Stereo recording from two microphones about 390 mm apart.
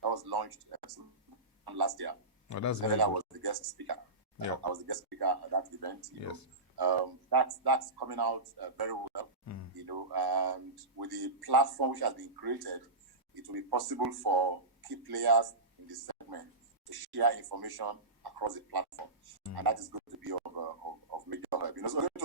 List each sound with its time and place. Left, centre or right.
0.0 s speech: right
2.5 s speech: left
3.0 s speech: right
6.2 s speech: left
6.7 s speech: right